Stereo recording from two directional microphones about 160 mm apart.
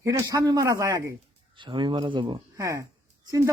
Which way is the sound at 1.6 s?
30° right (ahead or behind).